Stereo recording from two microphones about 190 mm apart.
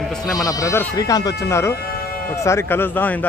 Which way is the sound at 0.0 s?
Centre (ahead or behind).